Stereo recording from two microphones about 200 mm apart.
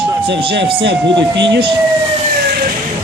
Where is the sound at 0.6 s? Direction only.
25° right (ahead or behind).